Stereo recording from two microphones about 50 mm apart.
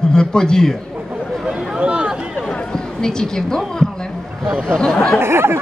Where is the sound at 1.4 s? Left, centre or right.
Centre.